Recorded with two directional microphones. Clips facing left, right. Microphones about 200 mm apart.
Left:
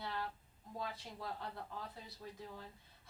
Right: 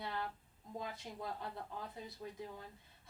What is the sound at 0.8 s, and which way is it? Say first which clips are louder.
Speech: even; 20° right (ahead or behind).